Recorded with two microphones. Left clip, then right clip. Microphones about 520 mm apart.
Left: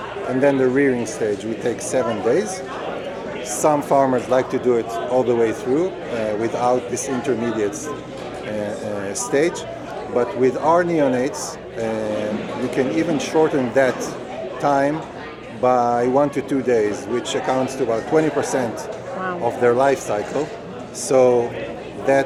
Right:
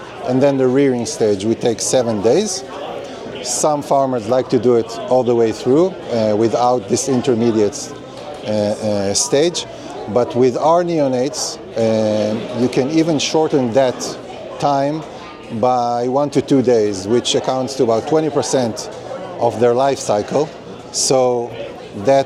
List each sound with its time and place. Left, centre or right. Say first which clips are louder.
0.3 s speech: right 3 dB; right
3.6 s speech: right 1 dB; right
12.7 s speech: right 3 dB; right